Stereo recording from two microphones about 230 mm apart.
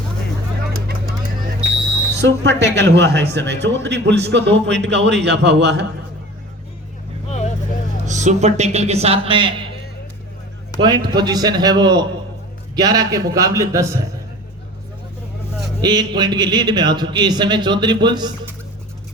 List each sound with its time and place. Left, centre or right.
2.1 s a man's voice: right
7.3 s vehicle: left
8.0 s speech: right
10.8 s a man's voice: centre
15.8 s speech: centre